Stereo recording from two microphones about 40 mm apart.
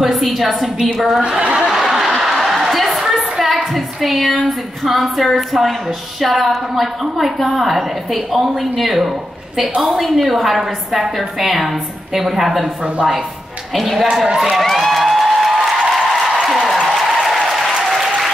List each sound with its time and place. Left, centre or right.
0.0 s a woman's voice: centre
1.4 s snicker: right
1.7 s a sound: centre
4.8 s a woman's voice: centre
13.7 s a woman's voice: centre
14.2 s speech: centre
14.5 s music: centre
15.9 s a sound: centre
16.4 s applause: centre